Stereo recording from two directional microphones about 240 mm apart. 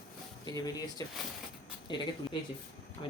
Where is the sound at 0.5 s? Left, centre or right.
Centre.